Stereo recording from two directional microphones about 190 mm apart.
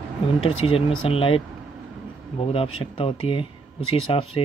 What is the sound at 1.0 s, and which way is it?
Speech, 30° left (ahead or behind).